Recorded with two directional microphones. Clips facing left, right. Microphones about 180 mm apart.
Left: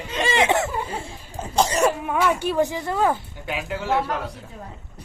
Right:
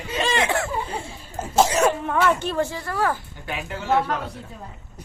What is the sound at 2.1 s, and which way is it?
Speech, 10° left (ahead or behind).